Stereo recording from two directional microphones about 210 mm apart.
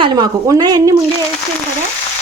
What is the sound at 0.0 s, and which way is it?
Speech, 20° right (ahead or behind).